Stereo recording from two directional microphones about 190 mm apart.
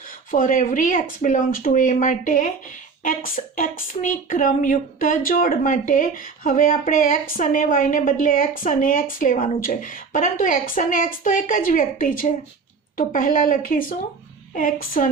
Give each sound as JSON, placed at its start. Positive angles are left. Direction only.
{"t": 0.3, "sound": "a woman's voice", "side_deg": 45}